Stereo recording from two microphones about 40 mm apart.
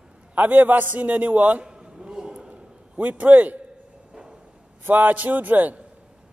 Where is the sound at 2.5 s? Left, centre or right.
Right.